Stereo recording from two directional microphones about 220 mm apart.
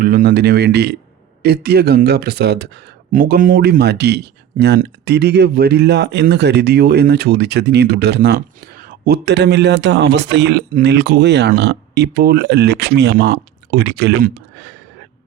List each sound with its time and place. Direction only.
0.0 s speech: 40° right (ahead or behind)